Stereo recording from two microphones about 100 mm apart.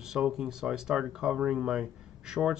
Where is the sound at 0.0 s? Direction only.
5° right (ahead or behind).